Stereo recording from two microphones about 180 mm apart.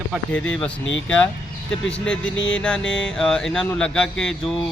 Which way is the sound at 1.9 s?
5° left (ahead or behind).